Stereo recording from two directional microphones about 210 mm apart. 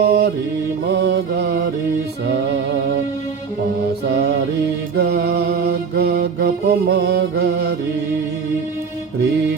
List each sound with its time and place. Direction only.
0.0 s mantra: 50° right (ahead or behind)
0.9 s music: 55° right (ahead or behind)
4.1 s music: 55° right (ahead or behind)
4.9 s mantra: 50° right (ahead or behind)